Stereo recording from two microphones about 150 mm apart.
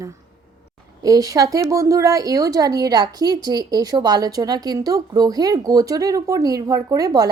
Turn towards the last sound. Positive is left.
turn(degrees=-25)  # may be behind; listen again after turning